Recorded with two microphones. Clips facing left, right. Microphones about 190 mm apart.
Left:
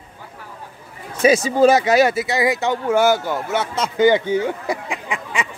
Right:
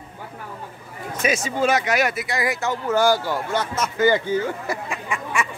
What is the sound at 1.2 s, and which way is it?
Speech, 35° left (ahead or behind).